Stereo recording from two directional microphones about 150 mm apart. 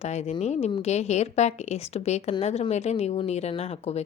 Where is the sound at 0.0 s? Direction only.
50° left (ahead or behind).